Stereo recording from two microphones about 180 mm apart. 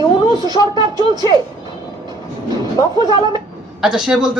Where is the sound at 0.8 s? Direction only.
25° right (ahead or behind).